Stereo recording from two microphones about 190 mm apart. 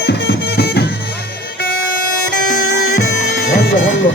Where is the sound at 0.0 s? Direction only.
60° left (ahead or behind).